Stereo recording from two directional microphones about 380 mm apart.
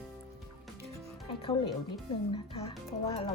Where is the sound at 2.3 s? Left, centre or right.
Centre.